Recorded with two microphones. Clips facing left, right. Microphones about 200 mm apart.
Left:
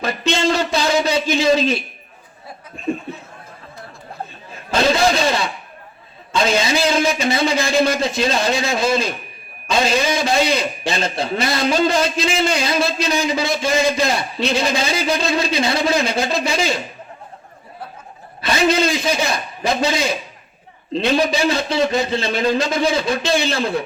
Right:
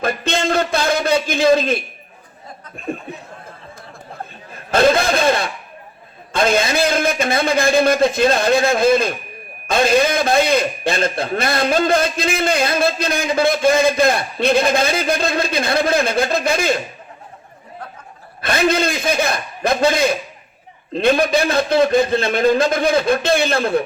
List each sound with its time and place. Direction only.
0.0 s a sound: 55° right (ahead or behind)
4.7 s a man's voice: 55° right (ahead or behind)
18.4 s a man's voice: 55° right (ahead or behind)